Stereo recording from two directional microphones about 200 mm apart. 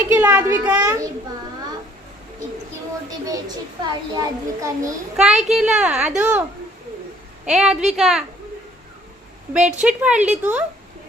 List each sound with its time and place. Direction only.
0.1 s a child's voice: 10° right (ahead or behind)
3.2 s a child's voice: 20° right (ahead or behind)
5.1 s a woman's voice: 5° right (ahead or behind)
7.4 s a woman's voice: 5° right (ahead or behind)
9.5 s a child's voice: 5° right (ahead or behind)